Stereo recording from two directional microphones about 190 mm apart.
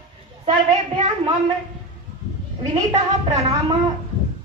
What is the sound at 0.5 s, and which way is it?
Speech, 25° right (ahead or behind).